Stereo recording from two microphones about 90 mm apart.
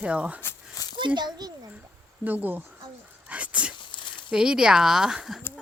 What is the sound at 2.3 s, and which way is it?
Speech, 20° right (ahead or behind).